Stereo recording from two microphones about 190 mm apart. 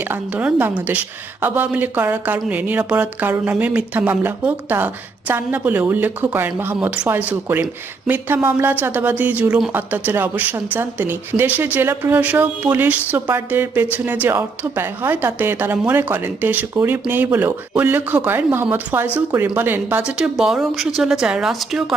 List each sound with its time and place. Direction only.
0.0 s a woman's voice: 10° right (ahead or behind)